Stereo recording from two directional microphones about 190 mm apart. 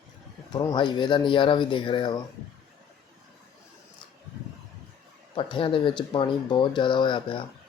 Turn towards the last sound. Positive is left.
turn(degrees=25)  # may be behind; listen again after turning